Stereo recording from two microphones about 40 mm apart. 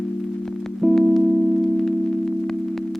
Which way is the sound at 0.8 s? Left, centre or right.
Left.